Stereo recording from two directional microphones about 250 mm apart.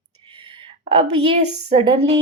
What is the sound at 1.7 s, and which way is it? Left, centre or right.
Speech, right.